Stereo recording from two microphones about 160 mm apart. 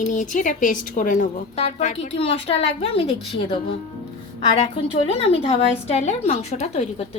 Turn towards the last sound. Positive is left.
turn(degrees=40)  # may be behind; listen again after turning